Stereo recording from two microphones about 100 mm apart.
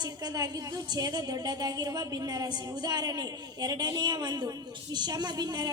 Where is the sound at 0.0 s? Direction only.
40° right (ahead or behind).